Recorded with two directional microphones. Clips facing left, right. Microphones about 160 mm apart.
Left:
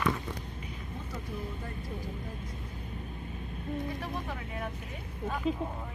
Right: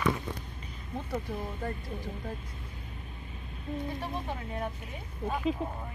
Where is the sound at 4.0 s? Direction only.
30° right (ahead or behind).